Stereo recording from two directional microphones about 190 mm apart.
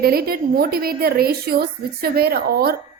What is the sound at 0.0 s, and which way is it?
A woman's voice, 55° right (ahead or behind).